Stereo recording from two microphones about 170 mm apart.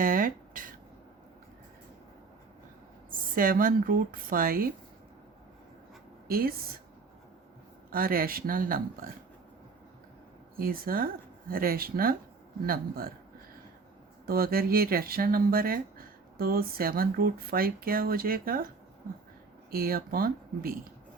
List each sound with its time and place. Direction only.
0.0 s a sound: 55° right (ahead or behind)
3.1 s speech: 55° right (ahead or behind)
6.2 s a woman's voice: 60° right (ahead or behind)
7.9 s speech: 60° right (ahead or behind)
10.6 s speech: 60° right (ahead or behind)
14.3 s speech: 60° right (ahead or behind)
19.7 s speech: 60° right (ahead or behind)